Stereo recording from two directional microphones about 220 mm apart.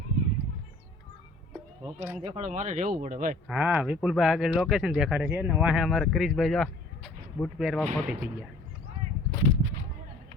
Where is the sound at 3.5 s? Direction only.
10° right (ahead or behind).